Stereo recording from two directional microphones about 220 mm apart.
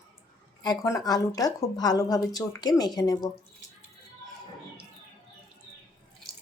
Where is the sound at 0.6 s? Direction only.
15° left (ahead or behind).